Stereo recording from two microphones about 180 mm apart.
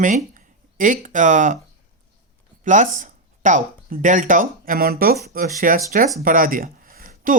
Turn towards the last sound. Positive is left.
turn(degrees=-50)  # may be behind; listen again after turning